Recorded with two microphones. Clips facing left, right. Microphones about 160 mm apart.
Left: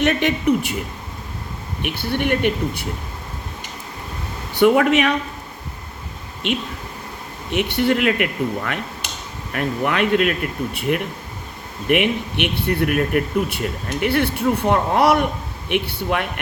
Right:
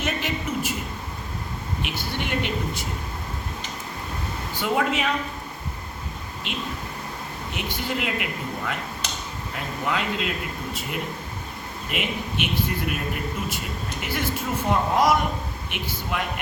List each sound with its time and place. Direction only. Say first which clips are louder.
0.0 s speech: left 10 dB; 70° left (ahead or behind)
1.8 s speech: left 9 dB; 55° left (ahead or behind)
4.5 s speech: left 10 dB; 65° left (ahead or behind)
7.5 s speech: left 11 dB; 70° left (ahead or behind)